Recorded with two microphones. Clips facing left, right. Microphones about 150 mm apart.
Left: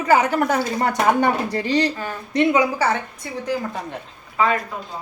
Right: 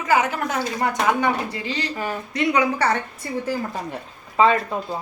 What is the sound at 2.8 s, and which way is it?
Speech, centre (ahead or behind).